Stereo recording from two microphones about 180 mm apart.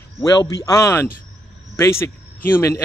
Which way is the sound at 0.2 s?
20° left (ahead or behind).